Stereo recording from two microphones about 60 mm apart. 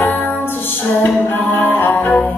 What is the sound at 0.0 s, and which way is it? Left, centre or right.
Music, left.